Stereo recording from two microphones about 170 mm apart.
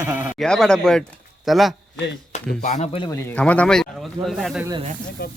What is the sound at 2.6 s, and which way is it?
Speech, 50° left (ahead or behind).